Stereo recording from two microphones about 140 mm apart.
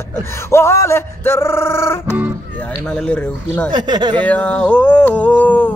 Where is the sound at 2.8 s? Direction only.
5° left (ahead or behind).